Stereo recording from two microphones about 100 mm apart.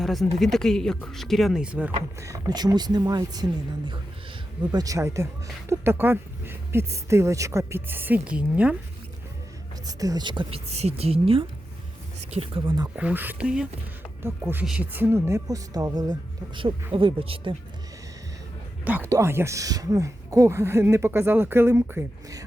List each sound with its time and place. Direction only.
0.0 s a sound: centre (ahead or behind)
0.3 s speech: 5° left (ahead or behind)
1.6 s speech: 10° right (ahead or behind)
2.5 s speech: 45° right (ahead or behind)
4.7 s speech: 35° right (ahead or behind); by 8.7 s 15° right (ahead or behind)
9.8 s speech: 40° right (ahead or behind)
10.5 s a woman's voice: 90° right; by 12.7 s 70° right (ahead or behind)
13.0 s speech: 15° right (ahead or behind)
14.6 s speech: 10° right (ahead or behind)
15.4 s speech: 35° right (ahead or behind)
16.9 s speech: 60° right (ahead or behind)
19.0 s speech: 30° right (ahead or behind)